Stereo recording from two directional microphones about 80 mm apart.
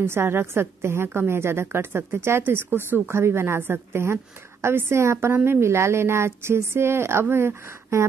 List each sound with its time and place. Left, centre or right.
0.0 s a woman's voice: right